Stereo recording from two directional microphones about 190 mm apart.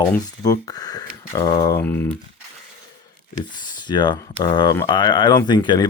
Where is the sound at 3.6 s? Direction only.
25° left (ahead or behind).